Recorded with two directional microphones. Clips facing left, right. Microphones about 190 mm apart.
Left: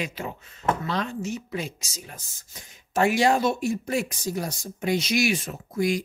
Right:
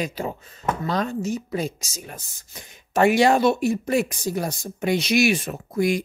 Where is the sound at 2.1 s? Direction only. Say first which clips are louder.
Right 5 dB; 65° right (ahead or behind).